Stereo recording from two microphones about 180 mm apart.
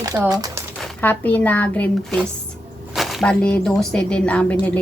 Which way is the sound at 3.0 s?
Centre (ahead or behind).